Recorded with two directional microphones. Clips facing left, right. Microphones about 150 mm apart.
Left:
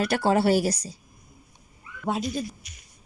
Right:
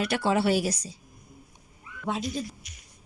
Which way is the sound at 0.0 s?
40° left (ahead or behind).